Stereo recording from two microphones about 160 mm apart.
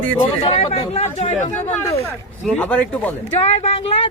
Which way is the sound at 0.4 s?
40° left (ahead or behind).